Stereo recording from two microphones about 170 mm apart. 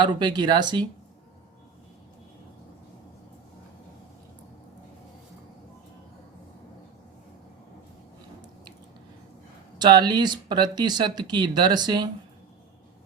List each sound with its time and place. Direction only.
0.0 s speech: 25° right (ahead or behind)
9.7 s speech: 25° right (ahead or behind)